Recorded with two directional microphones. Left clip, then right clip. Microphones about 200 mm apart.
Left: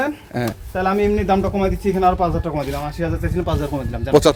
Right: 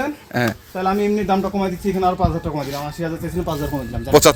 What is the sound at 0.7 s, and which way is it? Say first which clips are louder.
A man's voice: left 4 dB; 15° left (ahead or behind).